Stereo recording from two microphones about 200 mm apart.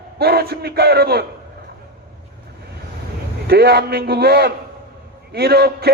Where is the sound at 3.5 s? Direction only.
50° right (ahead or behind).